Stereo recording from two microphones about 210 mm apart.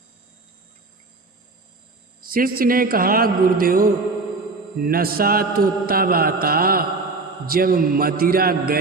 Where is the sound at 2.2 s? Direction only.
45° right (ahead or behind).